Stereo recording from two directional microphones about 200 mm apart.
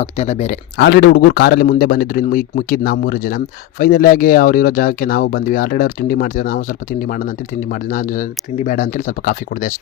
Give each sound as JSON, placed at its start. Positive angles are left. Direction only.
{"t": 0.0, "sound": "speech", "side_deg": 35}
{"t": 0.8, "sound": "a man's voice", "side_deg": 55}
{"t": 7.7, "sound": "speech", "side_deg": 45}